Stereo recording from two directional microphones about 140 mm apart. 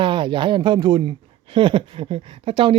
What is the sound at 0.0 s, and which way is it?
Speech, 35° right (ahead or behind).